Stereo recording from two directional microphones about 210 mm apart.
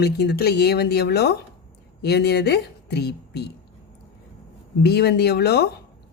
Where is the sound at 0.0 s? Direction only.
50° left (ahead or behind).